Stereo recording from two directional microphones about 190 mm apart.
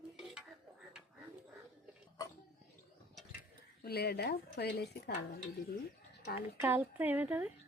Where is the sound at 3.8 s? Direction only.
60° left (ahead or behind).